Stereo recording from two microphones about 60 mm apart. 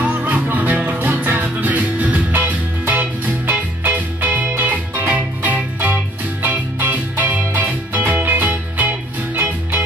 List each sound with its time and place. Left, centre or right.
0.0 s music: right